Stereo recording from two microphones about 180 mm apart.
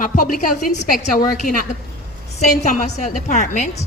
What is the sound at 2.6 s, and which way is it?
A woman's voice, 40° left (ahead or behind).